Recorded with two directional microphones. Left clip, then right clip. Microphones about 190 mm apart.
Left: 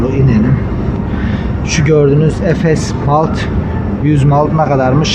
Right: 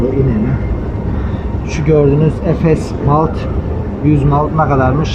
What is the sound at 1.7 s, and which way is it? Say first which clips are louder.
Speech: left 1 dB; centre (ahead or behind).